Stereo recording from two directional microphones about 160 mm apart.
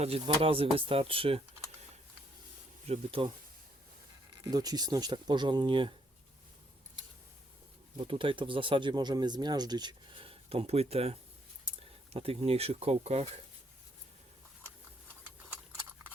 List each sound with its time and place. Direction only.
0.0 s speech: 35° right (ahead or behind)
2.8 s speech: 40° right (ahead or behind)
4.4 s speech: 25° right (ahead or behind)
7.9 s speech: 35° right (ahead or behind)